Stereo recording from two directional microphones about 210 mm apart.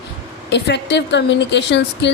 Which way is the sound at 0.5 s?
55° left (ahead or behind).